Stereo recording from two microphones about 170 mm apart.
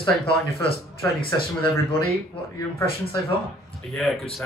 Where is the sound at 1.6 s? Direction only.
30° left (ahead or behind).